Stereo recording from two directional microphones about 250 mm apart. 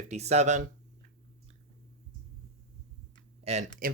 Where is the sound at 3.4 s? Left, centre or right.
Right.